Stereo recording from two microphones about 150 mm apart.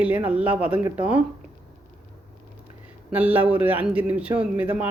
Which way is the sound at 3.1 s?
10° right (ahead or behind).